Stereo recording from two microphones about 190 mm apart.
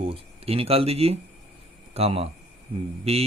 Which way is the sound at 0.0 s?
30° right (ahead or behind).